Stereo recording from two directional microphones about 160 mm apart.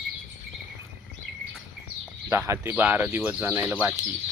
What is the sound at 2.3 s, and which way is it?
Speech, 15° right (ahead or behind).